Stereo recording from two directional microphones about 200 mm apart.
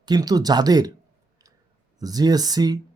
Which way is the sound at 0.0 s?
20° right (ahead or behind).